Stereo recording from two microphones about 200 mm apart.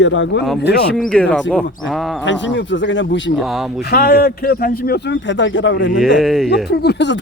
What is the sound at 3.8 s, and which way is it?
A man's voice, 50° left (ahead or behind).